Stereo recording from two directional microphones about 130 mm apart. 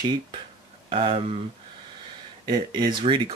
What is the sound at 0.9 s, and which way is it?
Speech, 45° right (ahead or behind).